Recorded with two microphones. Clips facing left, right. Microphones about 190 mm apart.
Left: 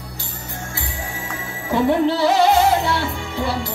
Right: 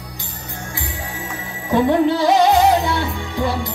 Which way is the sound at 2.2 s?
15° right (ahead or behind).